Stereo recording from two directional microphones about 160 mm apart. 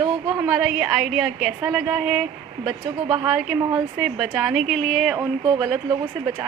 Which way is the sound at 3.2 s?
5° right (ahead or behind).